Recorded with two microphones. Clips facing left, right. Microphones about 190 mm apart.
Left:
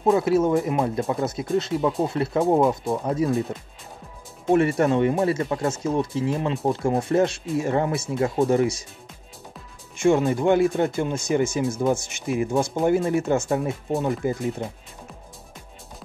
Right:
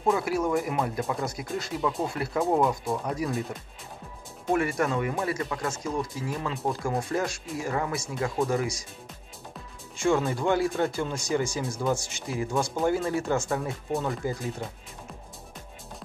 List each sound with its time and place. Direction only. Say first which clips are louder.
0.0 s speech: left 6 dB; 25° left (ahead or behind)
4.5 s speech: left 7 dB; 25° left (ahead or behind)
9.9 s speech: left 5 dB; 20° left (ahead or behind)